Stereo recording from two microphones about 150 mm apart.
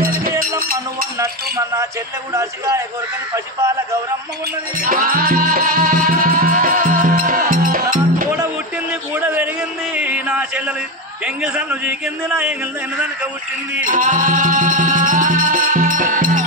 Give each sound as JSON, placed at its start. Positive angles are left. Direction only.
{"t": 0.0, "sound": "music", "side_deg": -70}
{"t": 1.2, "sound": "speech", "side_deg": -20}
{"t": 4.7, "sound": "music", "side_deg": -70}
{"t": 9.1, "sound": "a sound", "side_deg": -10}
{"t": 11.2, "sound": "a man's voice", "side_deg": -5}
{"t": 13.8, "sound": "music", "side_deg": -60}